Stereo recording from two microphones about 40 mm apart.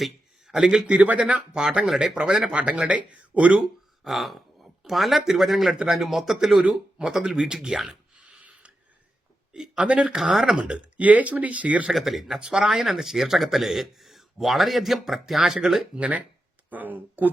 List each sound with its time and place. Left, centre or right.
0.4 s a man's voice: centre
0.9 s speech: right
1.5 s speech: centre
2.5 s speech: right
4.0 s speech: centre
7.3 s speech: centre
8.1 s a sound: right
9.5 s speech: right
10.2 s speech: centre
10.6 s speech: right
11.9 s speech: centre
16.0 s speech: right
16.6 s speech: right